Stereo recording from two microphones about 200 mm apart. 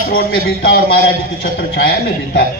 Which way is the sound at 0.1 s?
50° left (ahead or behind).